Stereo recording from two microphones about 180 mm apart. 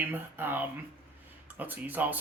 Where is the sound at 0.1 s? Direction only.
10° right (ahead or behind).